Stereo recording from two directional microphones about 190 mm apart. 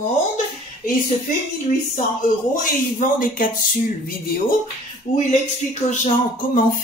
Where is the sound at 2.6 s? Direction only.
45° left (ahead or behind).